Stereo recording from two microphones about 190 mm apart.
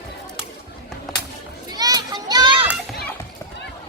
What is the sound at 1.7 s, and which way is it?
Children playing, 20° right (ahead or behind).